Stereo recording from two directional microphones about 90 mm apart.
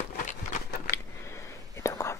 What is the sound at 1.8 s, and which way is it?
Whispering, 30° left (ahead or behind).